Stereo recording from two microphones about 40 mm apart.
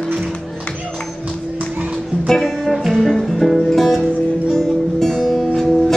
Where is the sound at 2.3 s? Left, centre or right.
Centre.